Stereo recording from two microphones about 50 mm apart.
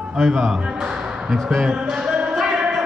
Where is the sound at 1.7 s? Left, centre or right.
Centre.